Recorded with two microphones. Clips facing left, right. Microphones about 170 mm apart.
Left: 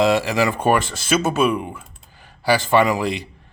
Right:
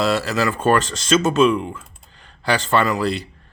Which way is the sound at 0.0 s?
15° left (ahead or behind).